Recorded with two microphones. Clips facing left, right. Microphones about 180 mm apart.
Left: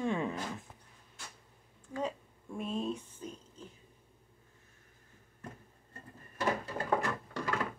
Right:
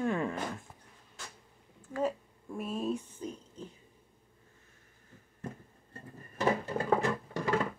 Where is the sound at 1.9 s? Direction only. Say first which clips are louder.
Right 4 dB; 5° right (ahead or behind).